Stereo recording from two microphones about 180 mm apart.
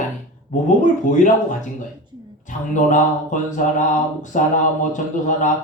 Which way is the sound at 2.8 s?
45° left (ahead or behind).